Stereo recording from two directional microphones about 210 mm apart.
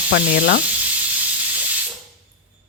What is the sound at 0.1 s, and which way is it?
Speech, 40° left (ahead or behind).